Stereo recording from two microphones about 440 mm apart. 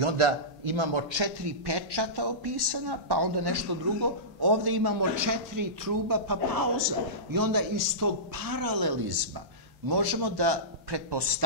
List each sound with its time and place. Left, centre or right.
0.7 s a man's voice: right